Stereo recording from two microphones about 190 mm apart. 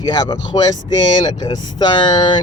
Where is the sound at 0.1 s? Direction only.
20° left (ahead or behind).